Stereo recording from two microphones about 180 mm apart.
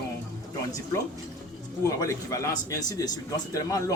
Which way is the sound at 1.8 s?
15° left (ahead or behind).